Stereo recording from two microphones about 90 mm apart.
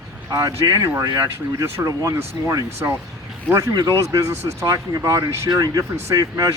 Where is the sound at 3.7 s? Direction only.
50° right (ahead or behind).